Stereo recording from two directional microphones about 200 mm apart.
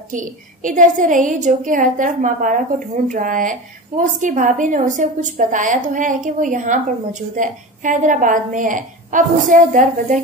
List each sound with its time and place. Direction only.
0.1 s a woman's voice: 40° right (ahead or behind)